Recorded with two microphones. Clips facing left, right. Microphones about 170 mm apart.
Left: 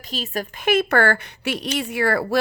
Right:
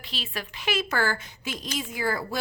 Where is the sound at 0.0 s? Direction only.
45° left (ahead or behind).